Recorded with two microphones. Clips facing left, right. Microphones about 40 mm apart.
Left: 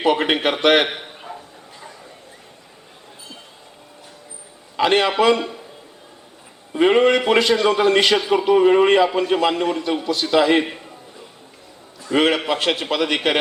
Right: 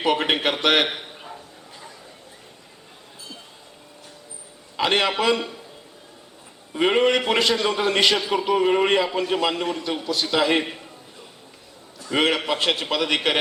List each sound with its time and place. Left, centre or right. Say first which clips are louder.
0.0 s a man's voice: left 3 dB; centre
4.9 s a man's voice: left 4 dB; centre
6.7 s a man's voice: left 4 dB; centre
12.1 s a man's voice: left 3 dB; centre